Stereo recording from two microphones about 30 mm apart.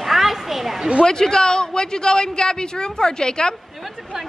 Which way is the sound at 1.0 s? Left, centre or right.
Left.